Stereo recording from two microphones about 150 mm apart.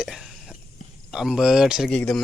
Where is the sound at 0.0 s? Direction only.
5° right (ahead or behind).